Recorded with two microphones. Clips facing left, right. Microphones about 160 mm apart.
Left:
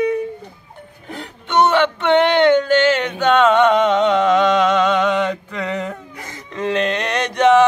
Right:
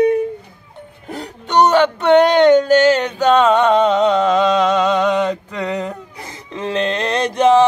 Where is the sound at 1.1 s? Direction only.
40° right (ahead or behind).